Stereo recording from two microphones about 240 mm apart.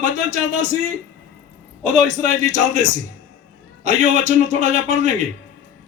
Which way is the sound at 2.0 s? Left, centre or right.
Right.